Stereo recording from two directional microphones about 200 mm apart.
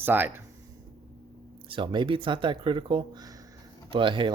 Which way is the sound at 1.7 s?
25° right (ahead or behind).